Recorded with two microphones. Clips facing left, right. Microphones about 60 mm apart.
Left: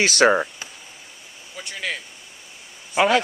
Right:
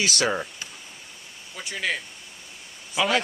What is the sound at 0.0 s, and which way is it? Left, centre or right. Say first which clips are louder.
Speech: left 8 dB; left.